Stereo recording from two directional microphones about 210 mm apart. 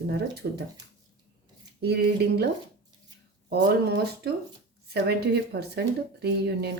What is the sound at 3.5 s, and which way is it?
Speech, 50° right (ahead or behind).